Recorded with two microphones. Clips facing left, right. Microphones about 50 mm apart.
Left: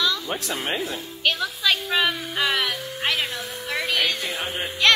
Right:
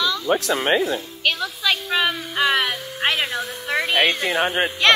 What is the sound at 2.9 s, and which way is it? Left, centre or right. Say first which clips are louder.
Speech: right 5 dB; right.